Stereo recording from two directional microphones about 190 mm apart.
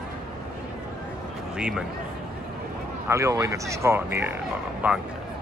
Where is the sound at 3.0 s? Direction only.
15° right (ahead or behind).